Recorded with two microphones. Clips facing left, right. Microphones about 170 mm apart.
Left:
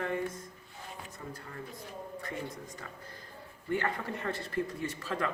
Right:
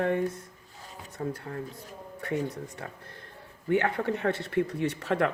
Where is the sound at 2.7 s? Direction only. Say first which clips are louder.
Right 4 dB; 65° right (ahead or behind).